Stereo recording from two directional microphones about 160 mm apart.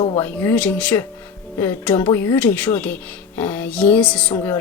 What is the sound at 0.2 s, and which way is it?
Speech, 15° left (ahead or behind).